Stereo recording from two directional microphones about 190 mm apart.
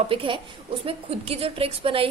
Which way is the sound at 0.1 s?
30° right (ahead or behind).